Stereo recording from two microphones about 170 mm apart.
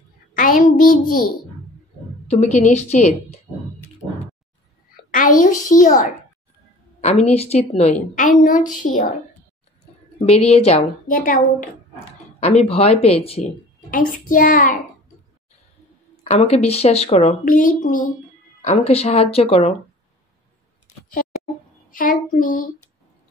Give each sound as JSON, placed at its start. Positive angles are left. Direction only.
{"t": 0.3, "sound": "a child's voice", "side_deg": 50}
{"t": 2.2, "sound": "a woman's voice", "side_deg": 40}
{"t": 5.1, "sound": "a child's voice", "side_deg": 50}
{"t": 7.0, "sound": "a woman's voice", "side_deg": 40}
{"t": 10.1, "sound": "a woman's voice", "side_deg": 35}
{"t": 11.1, "sound": "a woman's voice", "side_deg": 55}
{"t": 12.4, "sound": "a woman's voice", "side_deg": 40}
{"t": 13.8, "sound": "a woman's voice", "side_deg": 55}
{"t": 16.3, "sound": "a woman's voice", "side_deg": 40}
{"t": 18.6, "sound": "a woman's voice", "side_deg": 35}
{"t": 21.9, "sound": "a woman's voice", "side_deg": 55}